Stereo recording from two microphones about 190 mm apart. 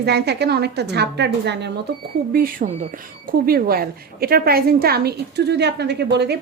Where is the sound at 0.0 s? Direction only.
60° right (ahead or behind).